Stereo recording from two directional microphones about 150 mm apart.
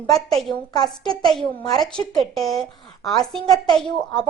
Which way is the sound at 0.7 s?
30° left (ahead or behind).